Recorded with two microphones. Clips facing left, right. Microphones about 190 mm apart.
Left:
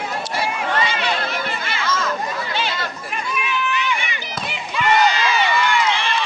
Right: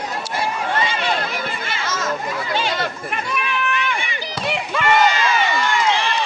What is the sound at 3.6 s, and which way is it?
Run, 50° right (ahead or behind).